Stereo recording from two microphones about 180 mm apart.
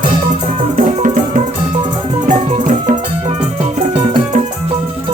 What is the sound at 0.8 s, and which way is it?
Music, 40° right (ahead or behind).